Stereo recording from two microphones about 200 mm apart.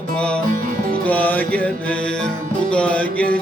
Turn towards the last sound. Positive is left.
turn(degrees=5)  # may be behind; listen again after turning